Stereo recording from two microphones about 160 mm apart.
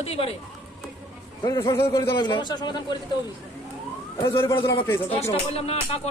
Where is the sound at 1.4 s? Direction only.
20° left (ahead or behind).